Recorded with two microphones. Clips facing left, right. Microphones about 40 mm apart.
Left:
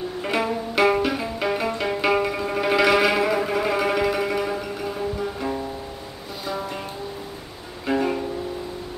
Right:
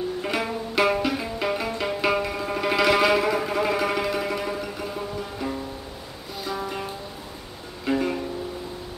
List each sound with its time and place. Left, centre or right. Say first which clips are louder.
0.2 s music: left 3 dB; centre
6.4 s music: even; centre
7.9 s music: left 2 dB; centre